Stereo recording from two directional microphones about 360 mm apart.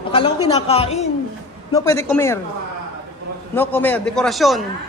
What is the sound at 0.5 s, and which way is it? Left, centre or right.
A woman's voice, centre.